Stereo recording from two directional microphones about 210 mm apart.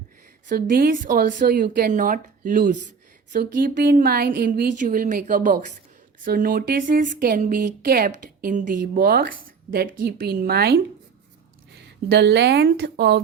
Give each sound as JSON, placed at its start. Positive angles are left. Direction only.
{"t": 0.4, "sound": "a woman's voice", "side_deg": -45}
{"t": 12.1, "sound": "speech", "side_deg": -55}